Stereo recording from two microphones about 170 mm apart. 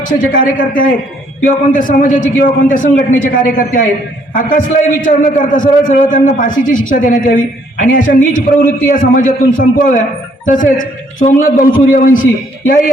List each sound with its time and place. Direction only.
0.0 s a man's voice: 55° left (ahead or behind)